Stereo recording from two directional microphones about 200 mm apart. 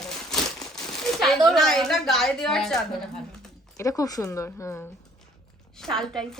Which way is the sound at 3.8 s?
15° left (ahead or behind).